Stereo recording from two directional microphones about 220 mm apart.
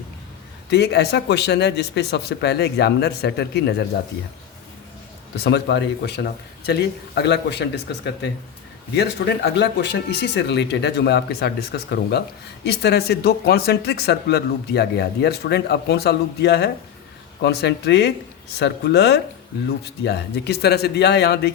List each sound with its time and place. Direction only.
0.7 s speech: 50° left (ahead or behind)
5.4 s speech: 50° left (ahead or behind)